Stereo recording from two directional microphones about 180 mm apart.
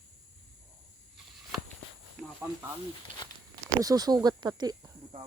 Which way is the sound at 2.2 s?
Centre (ahead or behind).